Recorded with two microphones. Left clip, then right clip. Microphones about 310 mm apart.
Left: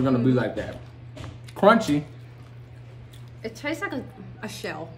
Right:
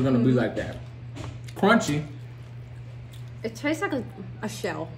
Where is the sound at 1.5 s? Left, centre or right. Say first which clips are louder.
Left 4 dB; centre.